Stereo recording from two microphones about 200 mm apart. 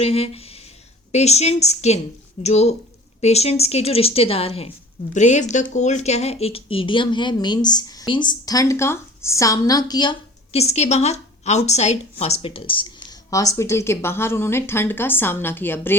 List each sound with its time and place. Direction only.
0.0 s a woman's voice: 30° left (ahead or behind); by 16.0 s 10° left (ahead or behind)